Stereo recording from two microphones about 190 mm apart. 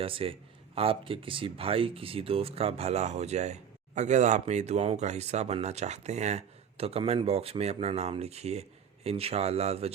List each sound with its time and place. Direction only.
0.0 s a man's voice: 30° right (ahead or behind)